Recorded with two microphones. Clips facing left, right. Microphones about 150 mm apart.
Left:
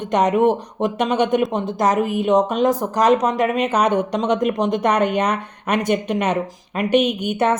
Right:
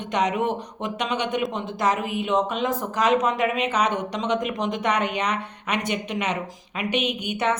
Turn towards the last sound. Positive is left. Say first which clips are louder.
# left 6 dB
turn(degrees=45)  # may be behind; listen again after turning